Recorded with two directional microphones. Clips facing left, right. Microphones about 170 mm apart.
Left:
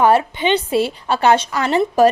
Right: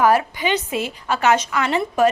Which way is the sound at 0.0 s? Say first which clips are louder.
Left 3 dB; 25° left (ahead or behind).